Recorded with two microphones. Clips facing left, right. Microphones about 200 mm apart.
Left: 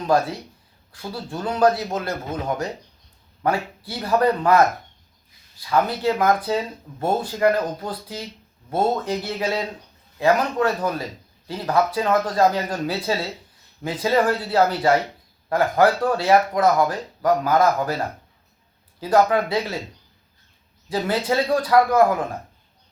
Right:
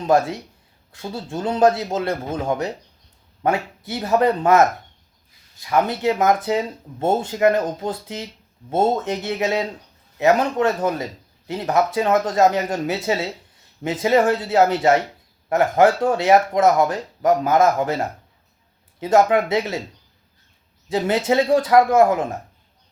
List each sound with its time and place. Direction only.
0.1 s speech: 25° right (ahead or behind)
5.6 s speech: 20° right (ahead or behind)
20.9 s speech: 25° right (ahead or behind)